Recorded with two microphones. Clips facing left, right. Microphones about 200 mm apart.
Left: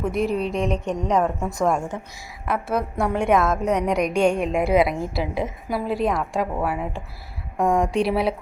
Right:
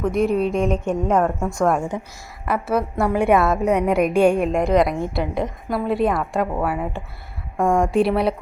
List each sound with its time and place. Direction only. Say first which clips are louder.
0.1 s a woman's voice: right 4 dB; centre (ahead or behind)
1.4 s a woman's voice: right 3 dB; 20° left (ahead or behind)
1.9 s speech: right 4 dB; 15° right (ahead or behind)
2.5 s a woman's voice: right 3 dB; 5° right (ahead or behind)